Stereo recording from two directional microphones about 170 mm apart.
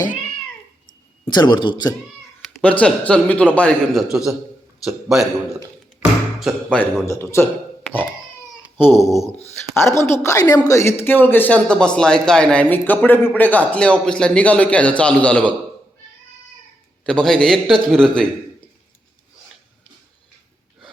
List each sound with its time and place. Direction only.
1.2 s a man's voice: 25° left (ahead or behind)
2.4 s a man's voice: 5° left (ahead or behind)
6.4 s a man's voice: centre (ahead or behind)
7.0 s speech: 15° left (ahead or behind)
8.8 s speech: 15° left (ahead or behind)
17.1 s a man's voice: 5° left (ahead or behind)